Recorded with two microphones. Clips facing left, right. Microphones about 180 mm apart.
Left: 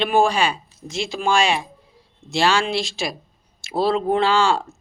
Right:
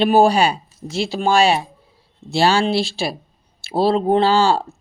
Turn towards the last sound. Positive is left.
turn(degrees=-35)  # may be behind; listen again after turning